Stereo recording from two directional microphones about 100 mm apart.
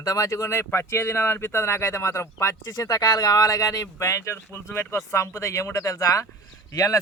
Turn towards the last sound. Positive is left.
turn(degrees=35)  # may be behind; listen again after turning